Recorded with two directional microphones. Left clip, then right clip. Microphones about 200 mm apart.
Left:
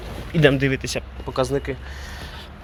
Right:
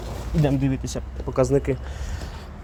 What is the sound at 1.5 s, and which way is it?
Speech, 30° right (ahead or behind).